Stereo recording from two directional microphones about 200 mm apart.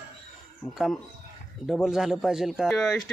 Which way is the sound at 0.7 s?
Centre (ahead or behind).